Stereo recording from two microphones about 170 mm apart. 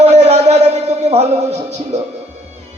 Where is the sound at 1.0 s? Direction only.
40° right (ahead or behind).